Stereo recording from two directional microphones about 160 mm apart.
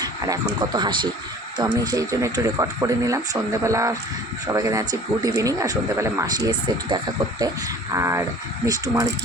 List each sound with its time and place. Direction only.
0.0 s speech: 25° right (ahead or behind)